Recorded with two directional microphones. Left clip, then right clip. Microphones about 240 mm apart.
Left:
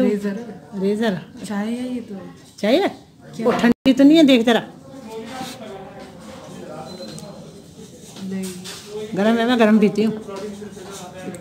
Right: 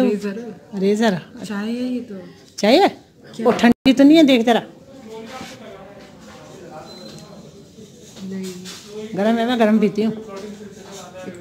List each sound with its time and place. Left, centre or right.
0.0 s a woman's voice: centre
9.1 s speech: centre